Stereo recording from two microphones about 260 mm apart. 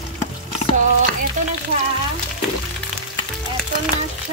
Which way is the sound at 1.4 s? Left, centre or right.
Right.